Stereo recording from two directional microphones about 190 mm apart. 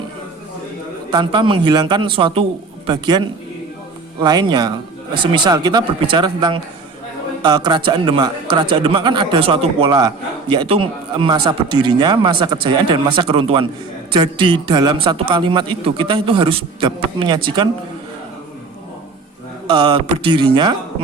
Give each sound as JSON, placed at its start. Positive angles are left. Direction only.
{"t": 1.1, "sound": "a man's voice", "side_deg": -25}
{"t": 20.2, "sound": "a man's voice", "side_deg": -25}